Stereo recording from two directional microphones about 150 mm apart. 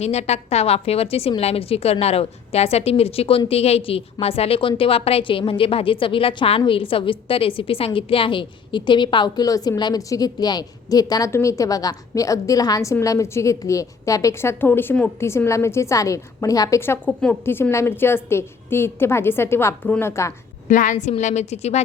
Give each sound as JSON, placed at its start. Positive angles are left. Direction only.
{"t": 0.0, "sound": "a woman's voice", "side_deg": 45}
{"t": 20.7, "sound": "a woman's voice", "side_deg": 60}